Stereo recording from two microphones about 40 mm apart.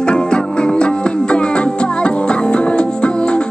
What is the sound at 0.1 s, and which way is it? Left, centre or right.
Music, left.